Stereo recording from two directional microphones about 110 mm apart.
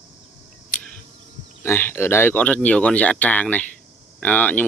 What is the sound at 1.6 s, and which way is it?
Speech, 20° left (ahead or behind).